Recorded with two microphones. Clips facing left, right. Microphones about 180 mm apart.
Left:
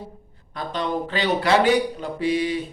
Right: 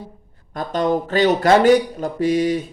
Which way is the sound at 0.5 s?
45° right (ahead or behind).